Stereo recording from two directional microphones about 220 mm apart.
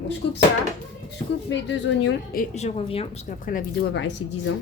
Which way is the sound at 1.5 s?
55° left (ahead or behind).